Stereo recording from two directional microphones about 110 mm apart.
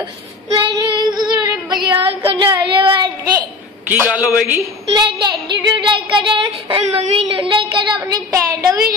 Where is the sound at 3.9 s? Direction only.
15° right (ahead or behind).